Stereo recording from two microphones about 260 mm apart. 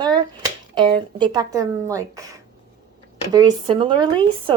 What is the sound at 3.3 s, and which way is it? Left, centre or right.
Speech, centre.